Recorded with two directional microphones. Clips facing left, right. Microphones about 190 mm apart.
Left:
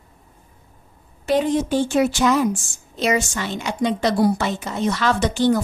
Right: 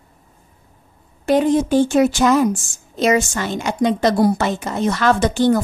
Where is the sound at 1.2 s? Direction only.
50° right (ahead or behind).